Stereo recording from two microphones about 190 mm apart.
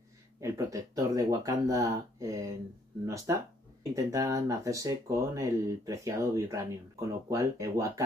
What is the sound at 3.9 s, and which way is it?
Speech, 15° right (ahead or behind).